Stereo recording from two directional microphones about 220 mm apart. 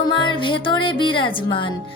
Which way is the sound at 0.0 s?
20° left (ahead or behind).